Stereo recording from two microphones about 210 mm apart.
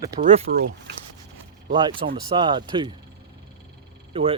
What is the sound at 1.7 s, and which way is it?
Speech, 20° right (ahead or behind).